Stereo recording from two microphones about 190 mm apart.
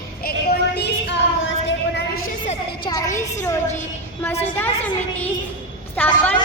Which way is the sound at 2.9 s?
15° left (ahead or behind).